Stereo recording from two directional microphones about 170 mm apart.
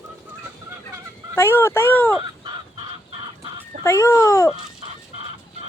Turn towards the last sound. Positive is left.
turn(degrees=15)  # may be behind; listen again after turning